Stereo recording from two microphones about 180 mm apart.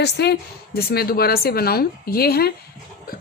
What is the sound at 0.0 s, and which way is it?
A woman's voice, 65° left (ahead or behind).